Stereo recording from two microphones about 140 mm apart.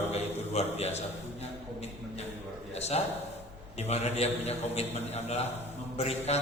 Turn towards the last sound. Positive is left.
turn(degrees=50)  # may be behind; listen again after turning